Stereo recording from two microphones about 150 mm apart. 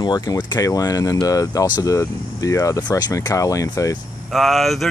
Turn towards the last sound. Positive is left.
turn(degrees=0)  # may be behind; listen again after turning